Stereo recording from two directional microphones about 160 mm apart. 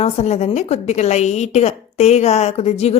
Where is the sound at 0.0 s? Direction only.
45° left (ahead or behind).